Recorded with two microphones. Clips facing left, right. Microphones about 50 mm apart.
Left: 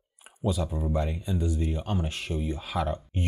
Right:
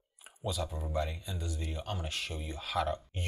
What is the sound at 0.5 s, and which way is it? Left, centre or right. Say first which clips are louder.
Speech: left 3 dB; centre.